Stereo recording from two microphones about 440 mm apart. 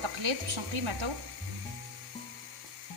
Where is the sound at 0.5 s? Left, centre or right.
Right.